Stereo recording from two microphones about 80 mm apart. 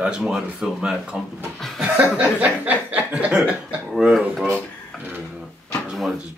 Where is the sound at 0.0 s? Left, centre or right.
Centre.